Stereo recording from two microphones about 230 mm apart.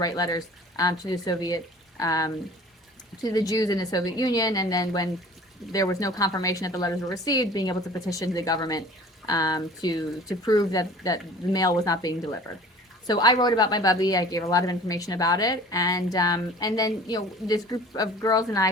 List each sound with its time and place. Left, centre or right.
0.0 s a woman's voice: centre